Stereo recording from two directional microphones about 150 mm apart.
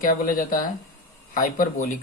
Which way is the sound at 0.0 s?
70° left (ahead or behind).